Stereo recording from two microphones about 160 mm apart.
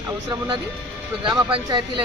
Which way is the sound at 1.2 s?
30° right (ahead or behind).